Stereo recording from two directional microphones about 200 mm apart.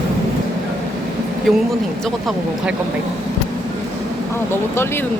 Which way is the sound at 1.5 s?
Centre (ahead or behind).